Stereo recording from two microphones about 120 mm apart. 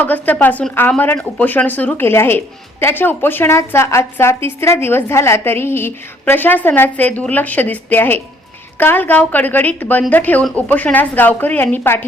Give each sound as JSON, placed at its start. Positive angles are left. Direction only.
{"t": 0.0, "sound": "a woman's voice", "side_deg": 15}